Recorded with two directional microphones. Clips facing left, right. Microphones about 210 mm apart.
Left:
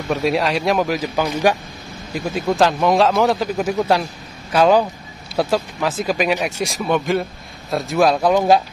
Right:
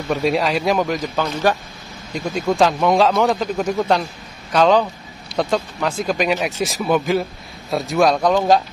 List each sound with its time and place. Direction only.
0.1 s speech: centre (ahead or behind)